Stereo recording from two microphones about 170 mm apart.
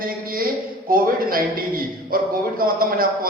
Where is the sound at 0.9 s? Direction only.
55° right (ahead or behind).